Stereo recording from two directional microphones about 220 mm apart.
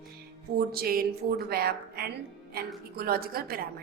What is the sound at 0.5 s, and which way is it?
A woman's voice, 45° right (ahead or behind).